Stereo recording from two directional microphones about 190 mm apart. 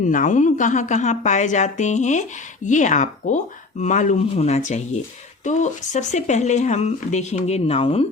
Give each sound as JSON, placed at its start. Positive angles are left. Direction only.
{"t": 0.0, "sound": "speech", "side_deg": 45}